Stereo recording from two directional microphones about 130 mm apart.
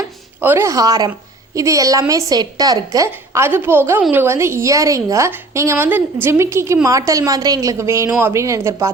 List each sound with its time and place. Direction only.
0.3 s a woman's voice: 15° right (ahead or behind)